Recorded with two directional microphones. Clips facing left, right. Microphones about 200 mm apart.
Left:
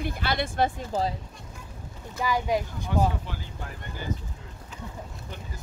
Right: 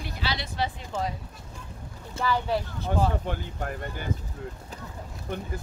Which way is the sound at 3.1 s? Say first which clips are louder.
Right 5 dB; 55° right (ahead or behind).